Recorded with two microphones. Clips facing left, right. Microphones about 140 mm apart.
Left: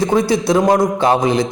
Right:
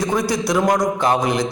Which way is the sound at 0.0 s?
25° left (ahead or behind).